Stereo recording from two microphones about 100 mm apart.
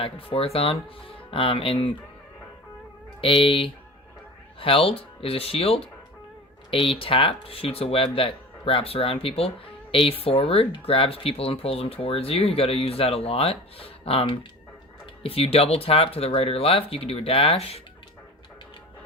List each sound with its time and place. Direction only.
0.0 s speech: 70° left (ahead or behind)
3.2 s speech: 65° left (ahead or behind); by 17.8 s 85° left